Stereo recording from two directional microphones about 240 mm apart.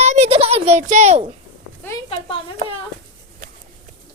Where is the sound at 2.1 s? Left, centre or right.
Left.